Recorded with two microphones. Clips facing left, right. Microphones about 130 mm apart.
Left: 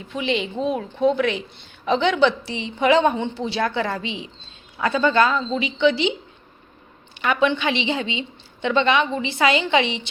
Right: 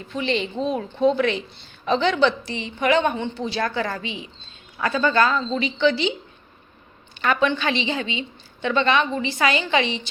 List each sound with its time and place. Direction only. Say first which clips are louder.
0.1 s a woman's voice: even; 10° left (ahead or behind)
7.2 s a woman's voice: left 1 dB; 15° left (ahead or behind)